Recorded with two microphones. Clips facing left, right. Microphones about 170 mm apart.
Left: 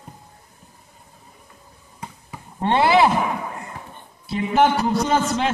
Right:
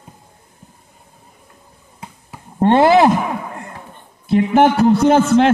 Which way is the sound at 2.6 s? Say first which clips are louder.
Right 6 dB; 45° right (ahead or behind).